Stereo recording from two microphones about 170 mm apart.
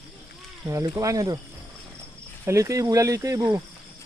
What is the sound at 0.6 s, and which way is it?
Speech, 20° right (ahead or behind).